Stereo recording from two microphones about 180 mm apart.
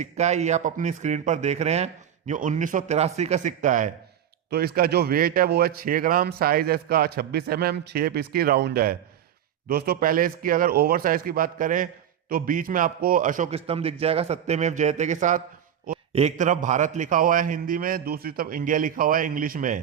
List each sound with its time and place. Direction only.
0.0 s speech: 40° right (ahead or behind)
4.4 s a man's voice: 60° right (ahead or behind)
13.5 s a man's voice: 35° right (ahead or behind)